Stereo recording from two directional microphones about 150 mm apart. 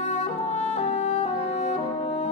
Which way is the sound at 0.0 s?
50° left (ahead or behind).